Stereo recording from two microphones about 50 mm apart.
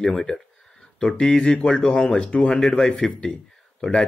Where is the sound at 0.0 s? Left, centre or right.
Centre.